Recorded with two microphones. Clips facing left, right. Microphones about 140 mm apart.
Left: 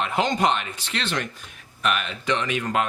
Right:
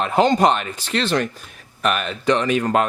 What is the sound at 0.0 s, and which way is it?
Speech, 40° right (ahead or behind).